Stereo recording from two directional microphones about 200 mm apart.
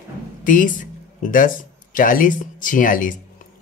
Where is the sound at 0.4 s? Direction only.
40° left (ahead or behind).